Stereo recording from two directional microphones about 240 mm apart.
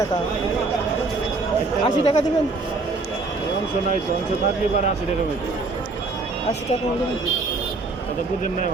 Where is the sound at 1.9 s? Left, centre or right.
Left.